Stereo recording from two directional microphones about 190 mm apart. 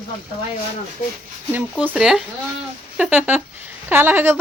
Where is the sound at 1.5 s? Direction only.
5° right (ahead or behind).